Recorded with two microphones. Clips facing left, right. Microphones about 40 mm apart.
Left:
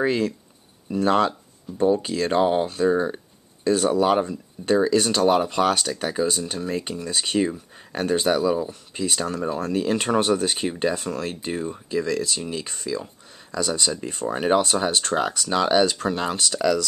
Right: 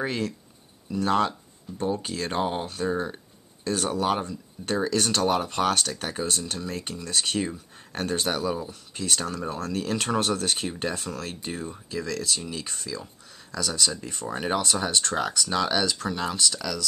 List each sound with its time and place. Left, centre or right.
0.0 s speech: centre
2.0 s speech: centre
6.1 s speech: left; by 8.7 s centre
8.9 s speech: centre